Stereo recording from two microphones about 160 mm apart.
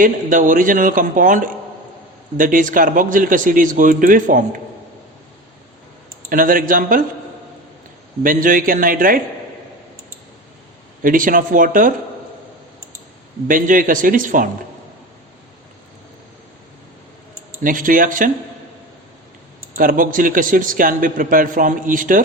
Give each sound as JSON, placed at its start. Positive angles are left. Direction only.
{"t": 0.0, "sound": "speech", "side_deg": -55}
{"t": 2.4, "sound": "speech", "side_deg": -55}
{"t": 6.2, "sound": "speech", "side_deg": -60}
{"t": 8.2, "sound": "speech", "side_deg": -60}
{"t": 11.0, "sound": "speech", "side_deg": -60}
{"t": 13.5, "sound": "speech", "side_deg": -60}
{"t": 17.6, "sound": "speech", "side_deg": -60}
{"t": 19.7, "sound": "speech", "side_deg": -60}